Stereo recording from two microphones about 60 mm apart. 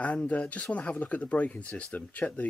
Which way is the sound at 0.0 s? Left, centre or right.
Left.